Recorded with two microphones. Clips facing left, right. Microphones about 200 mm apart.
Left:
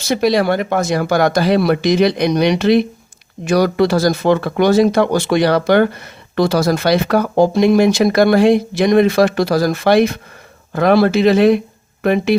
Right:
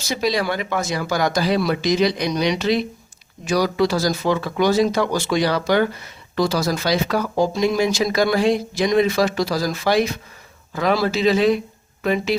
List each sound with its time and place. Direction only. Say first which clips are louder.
0.0 s speech: left 7 dB; 55° left (ahead or behind)